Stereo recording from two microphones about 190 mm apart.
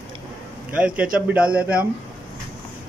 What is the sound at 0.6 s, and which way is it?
A man's voice, 5° right (ahead or behind).